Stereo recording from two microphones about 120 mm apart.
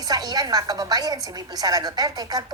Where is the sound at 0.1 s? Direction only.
35° right (ahead or behind).